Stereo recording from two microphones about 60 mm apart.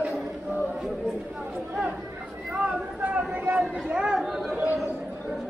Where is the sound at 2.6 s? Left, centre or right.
Right.